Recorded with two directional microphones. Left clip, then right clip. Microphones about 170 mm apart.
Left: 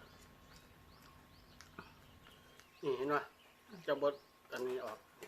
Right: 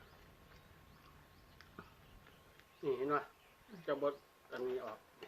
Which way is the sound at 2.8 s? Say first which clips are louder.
Even; 20° left (ahead or behind).